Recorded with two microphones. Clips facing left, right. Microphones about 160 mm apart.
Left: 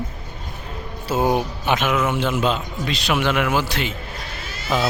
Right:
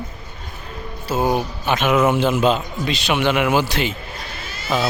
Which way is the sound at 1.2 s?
15° left (ahead or behind).